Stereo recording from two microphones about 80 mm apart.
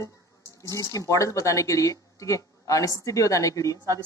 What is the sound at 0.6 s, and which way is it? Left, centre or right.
Speech, left.